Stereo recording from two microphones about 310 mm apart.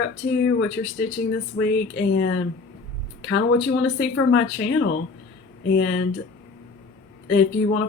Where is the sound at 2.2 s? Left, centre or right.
Left.